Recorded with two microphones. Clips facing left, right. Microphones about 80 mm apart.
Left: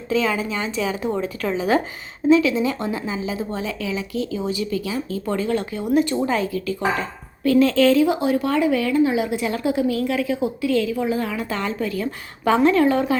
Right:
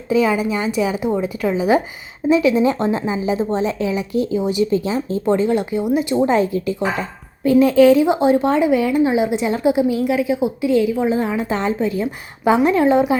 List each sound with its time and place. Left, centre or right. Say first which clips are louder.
0.1 s a woman's voice: right 5 dB; centre
5.8 s speech: right 2 dB; centre
6.2 s a woman's voice: right 5 dB; right